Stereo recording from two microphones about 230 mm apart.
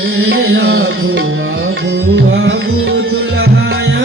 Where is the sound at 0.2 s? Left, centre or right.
Right.